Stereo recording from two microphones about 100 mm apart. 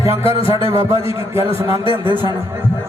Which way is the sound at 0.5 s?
25° right (ahead or behind).